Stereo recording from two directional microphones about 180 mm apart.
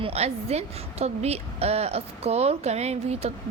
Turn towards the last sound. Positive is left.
turn(degrees=-35)  # may be behind; listen again after turning